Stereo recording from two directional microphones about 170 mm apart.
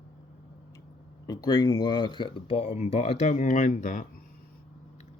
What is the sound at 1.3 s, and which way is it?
Speech, 20° left (ahead or behind).